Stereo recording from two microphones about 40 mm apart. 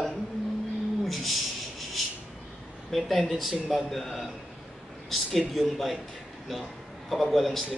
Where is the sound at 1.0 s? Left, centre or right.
Centre.